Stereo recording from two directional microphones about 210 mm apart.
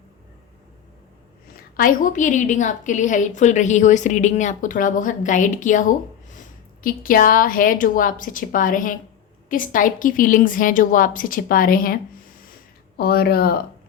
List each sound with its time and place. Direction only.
1.7 s a woman's voice: 40° left (ahead or behind)
13.0 s speech: 50° left (ahead or behind)